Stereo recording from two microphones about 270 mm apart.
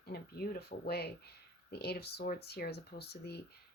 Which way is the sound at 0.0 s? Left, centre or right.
Left.